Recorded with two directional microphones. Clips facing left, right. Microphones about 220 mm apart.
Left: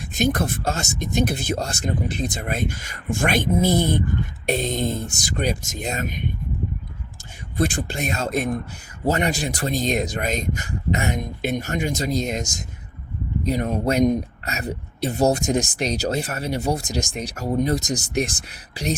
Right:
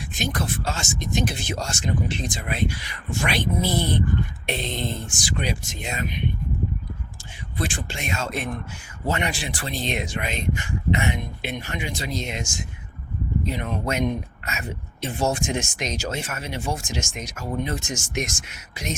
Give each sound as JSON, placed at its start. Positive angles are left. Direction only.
{"t": 0.3, "sound": "speech", "side_deg": 50}
{"t": 1.6, "sound": "speech", "side_deg": 35}
{"t": 7.5, "sound": "speech", "side_deg": 40}